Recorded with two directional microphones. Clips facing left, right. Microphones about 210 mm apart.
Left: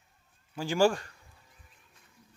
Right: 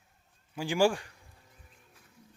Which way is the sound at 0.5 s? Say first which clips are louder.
Left 1 dB; 15° right (ahead or behind).